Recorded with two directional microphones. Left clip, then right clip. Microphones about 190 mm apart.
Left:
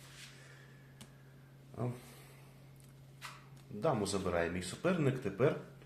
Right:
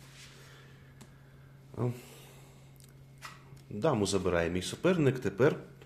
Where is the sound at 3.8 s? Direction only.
55° right (ahead or behind).